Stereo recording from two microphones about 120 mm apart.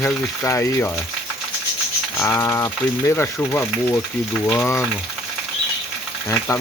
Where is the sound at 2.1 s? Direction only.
20° left (ahead or behind).